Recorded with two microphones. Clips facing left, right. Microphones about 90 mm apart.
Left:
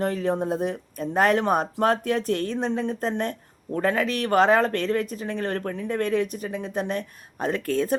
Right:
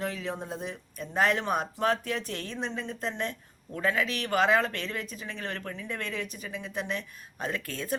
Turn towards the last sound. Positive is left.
turn(degrees=45)  # may be behind; listen again after turning